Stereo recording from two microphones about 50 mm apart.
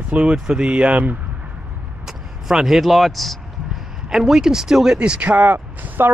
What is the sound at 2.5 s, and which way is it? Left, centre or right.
Speech, centre.